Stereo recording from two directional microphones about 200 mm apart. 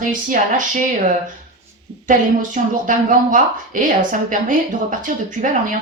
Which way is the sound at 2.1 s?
40° right (ahead or behind).